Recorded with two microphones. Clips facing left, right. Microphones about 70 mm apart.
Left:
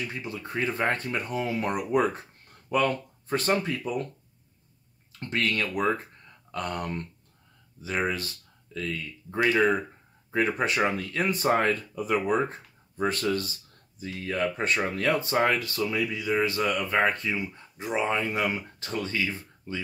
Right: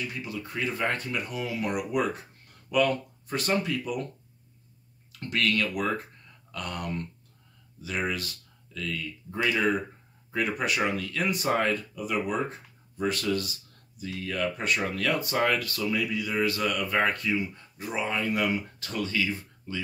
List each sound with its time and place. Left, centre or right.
0.1 s speech: left
5.3 s speech: left